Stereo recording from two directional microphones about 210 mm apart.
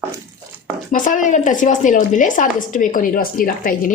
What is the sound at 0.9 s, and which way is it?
Speech, 40° left (ahead or behind).